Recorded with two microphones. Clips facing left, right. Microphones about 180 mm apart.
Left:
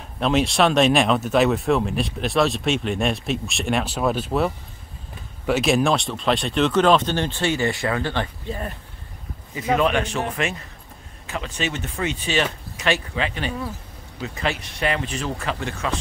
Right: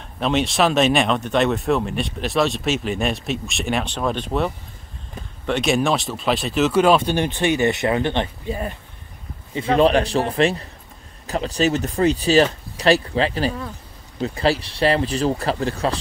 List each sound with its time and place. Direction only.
0.2 s speech: centre (ahead or behind)
5.5 s speech: centre (ahead or behind); by 8.3 s 20° right (ahead or behind)
8.5 s speech: 5° right (ahead or behind)
9.8 s speech: 35° right (ahead or behind)